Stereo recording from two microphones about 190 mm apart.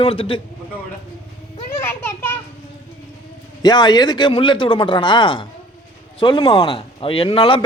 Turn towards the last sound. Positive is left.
turn(degrees=30)  # may be behind; listen again after turning